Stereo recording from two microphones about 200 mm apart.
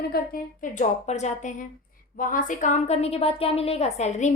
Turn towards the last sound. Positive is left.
turn(degrees=35)  # may be behind; listen again after turning